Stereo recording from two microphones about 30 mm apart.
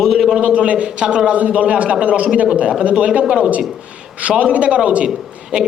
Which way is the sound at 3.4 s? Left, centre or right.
Right.